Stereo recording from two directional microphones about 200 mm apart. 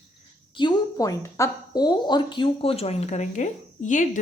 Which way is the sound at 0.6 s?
20° left (ahead or behind).